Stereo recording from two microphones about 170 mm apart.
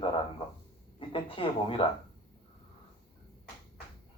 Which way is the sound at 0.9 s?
30° left (ahead or behind).